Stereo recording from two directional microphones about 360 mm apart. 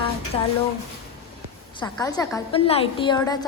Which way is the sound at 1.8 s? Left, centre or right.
Centre.